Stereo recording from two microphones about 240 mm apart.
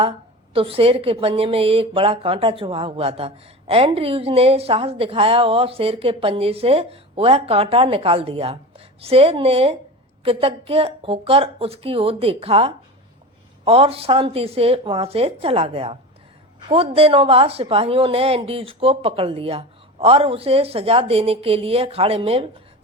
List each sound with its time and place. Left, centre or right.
0.5 s a woman's voice: right